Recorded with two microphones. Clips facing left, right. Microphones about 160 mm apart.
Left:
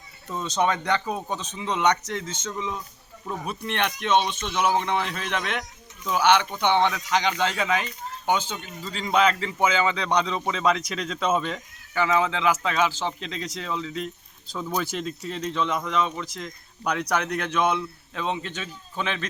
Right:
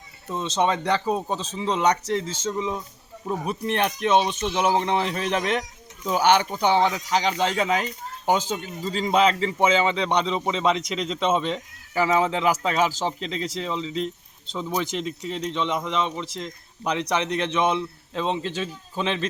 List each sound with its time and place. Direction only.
0.3 s a man's voice: 25° right (ahead or behind)
11.9 s speech: 35° right (ahead or behind)